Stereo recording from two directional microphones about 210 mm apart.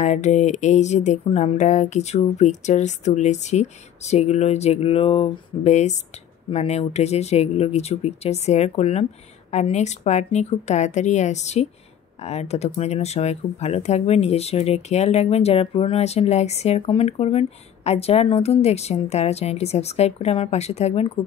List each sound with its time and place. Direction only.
0.0 s speech: 35° left (ahead or behind)